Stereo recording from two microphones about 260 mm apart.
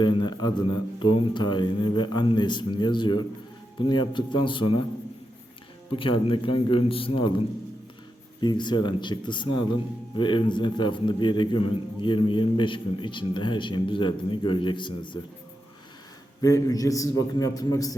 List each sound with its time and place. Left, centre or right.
0.0 s a man's voice: centre
5.9 s a man's voice: centre
16.4 s a man's voice: centre